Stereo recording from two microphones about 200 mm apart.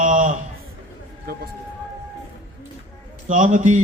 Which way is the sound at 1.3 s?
50° right (ahead or behind).